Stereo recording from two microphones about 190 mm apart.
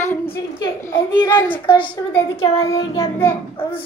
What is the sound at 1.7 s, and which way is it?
A child's voice, 25° left (ahead or behind).